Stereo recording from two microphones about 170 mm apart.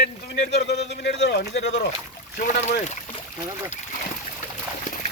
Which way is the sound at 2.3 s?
45° left (ahead or behind).